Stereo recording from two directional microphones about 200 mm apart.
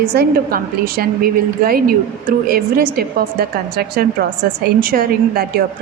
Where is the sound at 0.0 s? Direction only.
50° right (ahead or behind).